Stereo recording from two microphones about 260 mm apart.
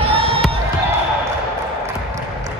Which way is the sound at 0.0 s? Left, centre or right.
Right.